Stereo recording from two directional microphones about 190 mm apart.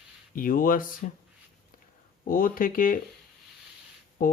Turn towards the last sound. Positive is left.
turn(degrees=45)  # may be behind; listen again after turning